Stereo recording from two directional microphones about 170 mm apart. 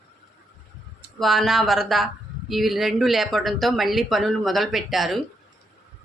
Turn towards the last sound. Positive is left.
turn(degrees=0)  # may be behind; listen again after turning